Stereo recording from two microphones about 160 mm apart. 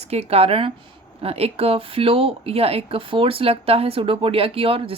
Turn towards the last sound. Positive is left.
turn(degrees=-35)  # may be behind; listen again after turning